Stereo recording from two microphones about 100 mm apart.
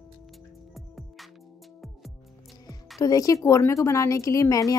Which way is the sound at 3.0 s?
35° left (ahead or behind).